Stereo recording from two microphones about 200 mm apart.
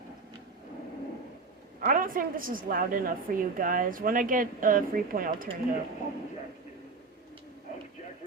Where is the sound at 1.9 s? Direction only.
45° right (ahead or behind).